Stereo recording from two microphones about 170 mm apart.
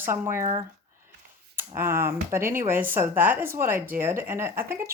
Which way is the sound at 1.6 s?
15° right (ahead or behind).